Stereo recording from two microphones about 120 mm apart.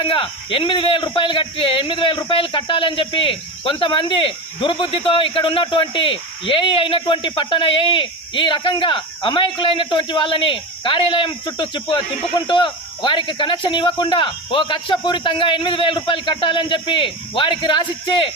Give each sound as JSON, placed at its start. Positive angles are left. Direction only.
{"t": 0.0, "sound": "speech", "side_deg": 45}